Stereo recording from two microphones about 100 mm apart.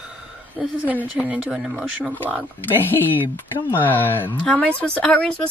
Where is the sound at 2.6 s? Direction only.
20° left (ahead or behind).